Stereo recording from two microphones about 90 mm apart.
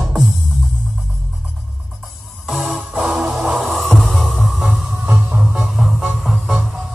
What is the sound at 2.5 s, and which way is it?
Music, centre (ahead or behind).